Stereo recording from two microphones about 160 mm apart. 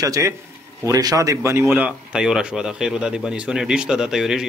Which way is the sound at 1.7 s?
5° right (ahead or behind).